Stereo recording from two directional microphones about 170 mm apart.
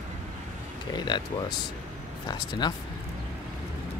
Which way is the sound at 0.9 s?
25° left (ahead or behind).